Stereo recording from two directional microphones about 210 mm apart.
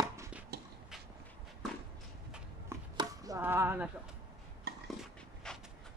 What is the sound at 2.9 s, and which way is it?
Chop, 15° right (ahead or behind).